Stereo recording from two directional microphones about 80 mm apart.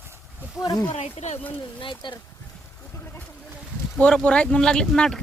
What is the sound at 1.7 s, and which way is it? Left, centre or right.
Speech, left.